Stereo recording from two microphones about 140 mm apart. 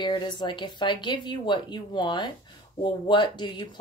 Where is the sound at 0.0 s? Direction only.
35° left (ahead or behind).